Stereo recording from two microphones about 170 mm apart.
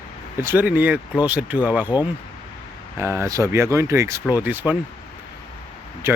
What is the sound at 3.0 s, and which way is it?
Speech, 15° right (ahead or behind).